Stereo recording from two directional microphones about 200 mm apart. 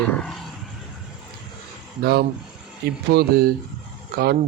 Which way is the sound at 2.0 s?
55° right (ahead or behind).